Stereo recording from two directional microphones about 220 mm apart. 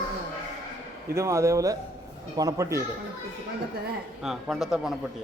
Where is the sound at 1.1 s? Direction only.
15° right (ahead or behind).